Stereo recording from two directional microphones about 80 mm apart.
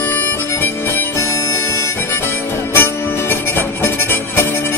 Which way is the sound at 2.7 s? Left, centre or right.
Left.